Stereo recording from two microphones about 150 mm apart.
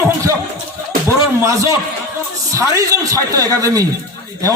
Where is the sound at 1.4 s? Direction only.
20° right (ahead or behind).